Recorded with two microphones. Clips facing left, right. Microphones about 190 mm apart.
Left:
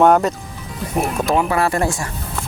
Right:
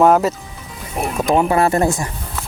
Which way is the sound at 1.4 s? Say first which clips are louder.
Right 5 dB; 25° right (ahead or behind).